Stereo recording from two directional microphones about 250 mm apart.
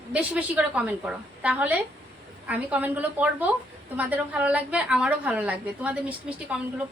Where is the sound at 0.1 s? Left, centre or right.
Centre.